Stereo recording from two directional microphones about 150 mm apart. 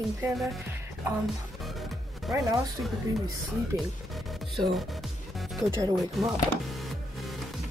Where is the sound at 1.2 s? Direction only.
Centre (ahead or behind).